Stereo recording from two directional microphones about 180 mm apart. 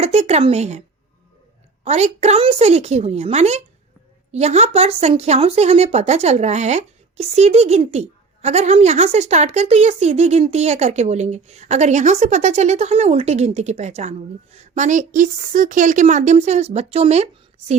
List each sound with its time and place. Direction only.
0.0 s speech: 35° right (ahead or behind)
1.8 s speech: 35° right (ahead or behind)